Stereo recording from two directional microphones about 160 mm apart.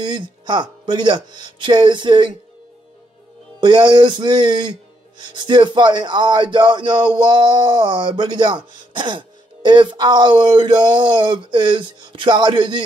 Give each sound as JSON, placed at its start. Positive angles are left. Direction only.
{"t": 0.0, "sound": "speech", "side_deg": -30}
{"t": 3.6, "sound": "speech", "side_deg": -30}